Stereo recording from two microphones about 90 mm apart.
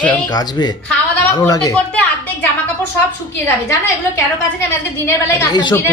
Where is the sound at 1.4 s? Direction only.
40° left (ahead or behind).